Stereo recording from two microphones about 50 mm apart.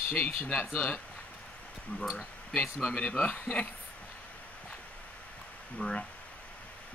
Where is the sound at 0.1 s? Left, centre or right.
Left.